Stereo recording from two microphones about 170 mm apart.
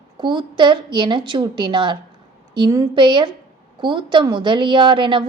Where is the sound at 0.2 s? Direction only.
25° right (ahead or behind).